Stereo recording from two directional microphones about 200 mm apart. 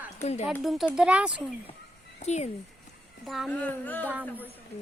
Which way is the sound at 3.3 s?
5° left (ahead or behind).